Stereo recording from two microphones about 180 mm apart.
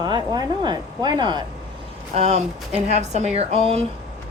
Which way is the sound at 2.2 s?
35° right (ahead or behind).